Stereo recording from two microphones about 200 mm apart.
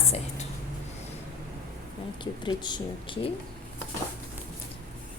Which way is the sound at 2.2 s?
25° left (ahead or behind).